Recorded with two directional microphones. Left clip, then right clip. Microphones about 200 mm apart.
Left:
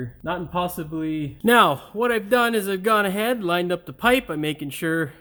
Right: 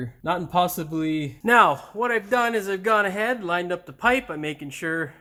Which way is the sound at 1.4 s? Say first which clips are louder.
Even; 45° left (ahead or behind).